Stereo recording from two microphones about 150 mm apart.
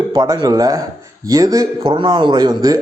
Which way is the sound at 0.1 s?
25° right (ahead or behind).